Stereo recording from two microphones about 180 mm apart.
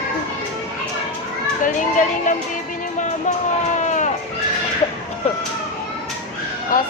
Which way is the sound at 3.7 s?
40° left (ahead or behind).